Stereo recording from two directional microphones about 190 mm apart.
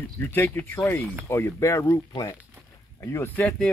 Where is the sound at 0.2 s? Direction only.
10° left (ahead or behind).